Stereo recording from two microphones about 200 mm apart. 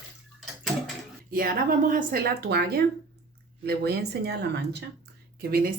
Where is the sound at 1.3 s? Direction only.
45° right (ahead or behind).